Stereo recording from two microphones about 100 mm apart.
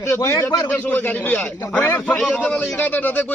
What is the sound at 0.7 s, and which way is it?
Speech, 15° left (ahead or behind).